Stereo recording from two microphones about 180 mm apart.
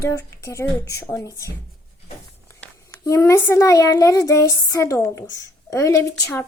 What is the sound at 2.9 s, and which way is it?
A child's voice, 15° left (ahead or behind).